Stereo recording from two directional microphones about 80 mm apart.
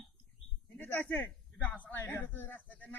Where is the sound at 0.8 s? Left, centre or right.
Centre.